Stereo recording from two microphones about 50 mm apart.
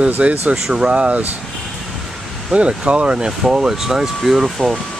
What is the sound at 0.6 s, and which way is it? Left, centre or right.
Speech, centre.